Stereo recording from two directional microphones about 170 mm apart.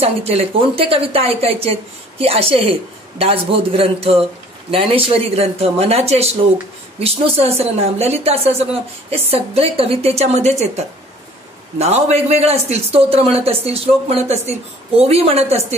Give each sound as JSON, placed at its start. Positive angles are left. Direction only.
{"t": 0.0, "sound": "a woman's voice", "side_deg": -35}
{"t": 11.8, "sound": "a woman's voice", "side_deg": -40}